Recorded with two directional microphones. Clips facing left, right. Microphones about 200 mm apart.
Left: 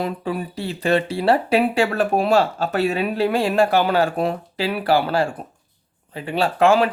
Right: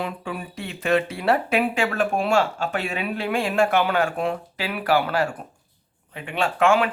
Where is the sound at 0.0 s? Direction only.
35° left (ahead or behind).